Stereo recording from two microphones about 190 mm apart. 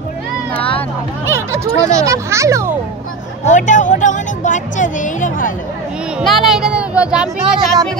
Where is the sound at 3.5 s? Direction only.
40° left (ahead or behind).